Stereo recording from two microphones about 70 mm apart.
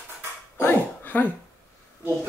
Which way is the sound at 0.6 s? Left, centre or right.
Left.